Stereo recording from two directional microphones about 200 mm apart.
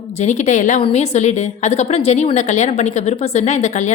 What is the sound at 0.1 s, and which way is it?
A woman's voice, 35° left (ahead or behind).